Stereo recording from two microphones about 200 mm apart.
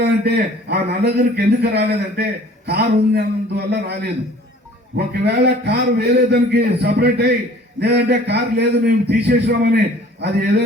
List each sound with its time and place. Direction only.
0.0 s a man's voice: 55° right (ahead or behind)
4.9 s a man's voice: 55° right (ahead or behind)